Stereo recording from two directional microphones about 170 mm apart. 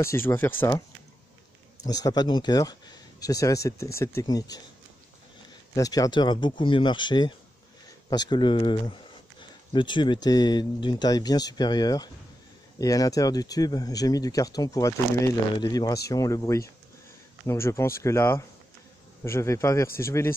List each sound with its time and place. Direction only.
0.0 s speech: 15° left (ahead or behind)
5.8 s speech: 20° left (ahead or behind)